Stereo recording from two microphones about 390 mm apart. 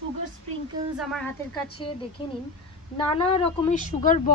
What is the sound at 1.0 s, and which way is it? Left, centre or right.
Speech, centre.